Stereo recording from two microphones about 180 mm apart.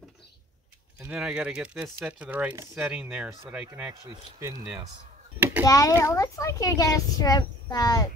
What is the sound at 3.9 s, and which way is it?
Speech, 20° right (ahead or behind).